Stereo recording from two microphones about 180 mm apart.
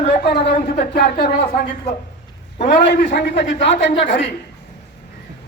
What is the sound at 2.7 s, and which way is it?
Speech, 55° left (ahead or behind).